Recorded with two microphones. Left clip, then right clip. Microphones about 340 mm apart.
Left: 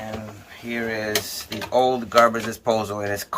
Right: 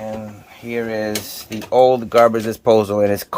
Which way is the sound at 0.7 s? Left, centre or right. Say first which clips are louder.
Right 3 dB; right.